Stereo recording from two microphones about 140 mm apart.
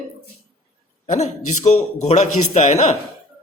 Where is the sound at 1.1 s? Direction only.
55° left (ahead or behind).